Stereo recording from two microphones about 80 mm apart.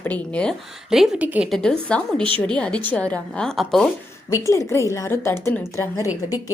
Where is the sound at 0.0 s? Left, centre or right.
Left.